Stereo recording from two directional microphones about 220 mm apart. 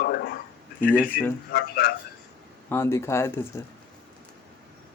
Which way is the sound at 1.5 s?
45° left (ahead or behind).